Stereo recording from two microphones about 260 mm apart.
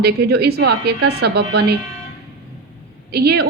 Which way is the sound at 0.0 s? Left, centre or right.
Right.